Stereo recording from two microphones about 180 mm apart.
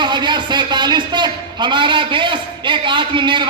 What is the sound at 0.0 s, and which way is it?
A man's voice, 25° right (ahead or behind).